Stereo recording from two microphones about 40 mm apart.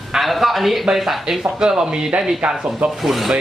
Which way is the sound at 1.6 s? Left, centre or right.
Centre.